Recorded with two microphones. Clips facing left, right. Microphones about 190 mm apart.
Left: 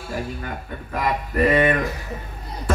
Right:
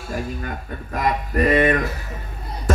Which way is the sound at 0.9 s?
40° right (ahead or behind).